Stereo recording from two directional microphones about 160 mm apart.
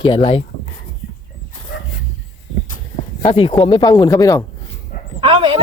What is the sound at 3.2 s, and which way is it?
Speech, 35° left (ahead or behind).